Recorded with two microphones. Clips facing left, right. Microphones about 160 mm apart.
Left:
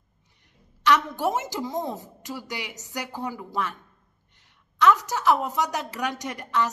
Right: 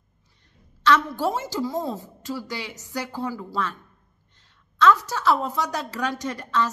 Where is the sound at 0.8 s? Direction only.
20° left (ahead or behind).